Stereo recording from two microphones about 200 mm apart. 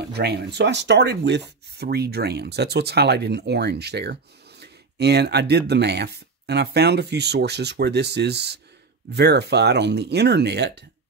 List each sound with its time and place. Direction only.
0.0 s speech: 55° right (ahead or behind)